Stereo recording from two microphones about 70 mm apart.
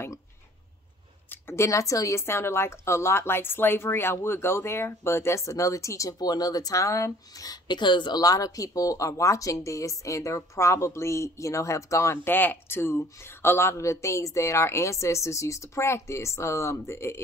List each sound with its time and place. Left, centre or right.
1.3 s speech: left
7.6 s speech: left
12.3 s speech: left